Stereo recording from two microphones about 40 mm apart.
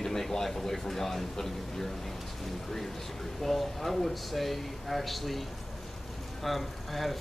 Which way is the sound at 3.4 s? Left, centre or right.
Centre.